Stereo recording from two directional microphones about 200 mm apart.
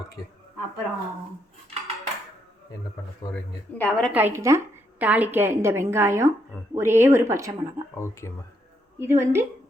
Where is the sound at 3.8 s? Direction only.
5° left (ahead or behind).